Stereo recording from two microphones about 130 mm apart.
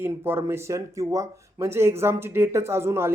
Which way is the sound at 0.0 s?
20° right (ahead or behind).